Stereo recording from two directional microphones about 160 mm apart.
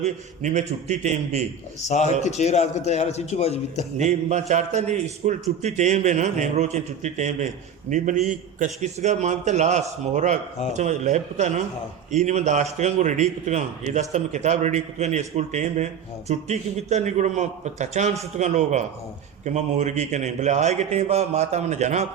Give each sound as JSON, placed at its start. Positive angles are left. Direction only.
{"t": 0.0, "sound": "a man's voice", "side_deg": -45}
{"t": 1.8, "sound": "a man's voice", "side_deg": 45}
{"t": 3.9, "sound": "a man's voice", "side_deg": -45}